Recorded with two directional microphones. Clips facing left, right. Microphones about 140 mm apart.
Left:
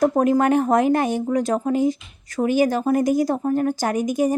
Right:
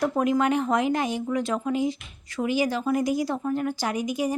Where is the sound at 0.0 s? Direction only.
45° left (ahead or behind).